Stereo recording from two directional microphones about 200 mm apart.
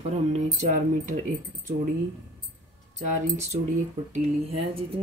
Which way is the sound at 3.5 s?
35° right (ahead or behind).